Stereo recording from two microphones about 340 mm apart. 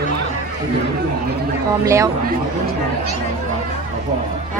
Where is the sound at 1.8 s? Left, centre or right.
Centre.